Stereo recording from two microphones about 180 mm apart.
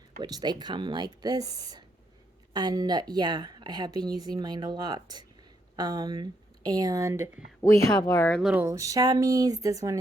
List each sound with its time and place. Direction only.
0.2 s a woman's voice: 20° right (ahead or behind)
7.7 s speech: 20° left (ahead or behind)
8.4 s speech: 5° right (ahead or behind)
8.6 s a woman's voice: 15° right (ahead or behind)